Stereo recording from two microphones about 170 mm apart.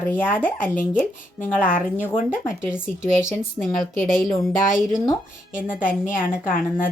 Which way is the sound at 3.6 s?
20° left (ahead or behind).